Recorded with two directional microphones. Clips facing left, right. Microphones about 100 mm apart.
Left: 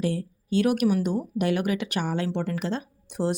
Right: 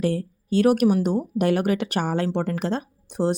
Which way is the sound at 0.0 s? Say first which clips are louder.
Right 4 dB; 50° right (ahead or behind).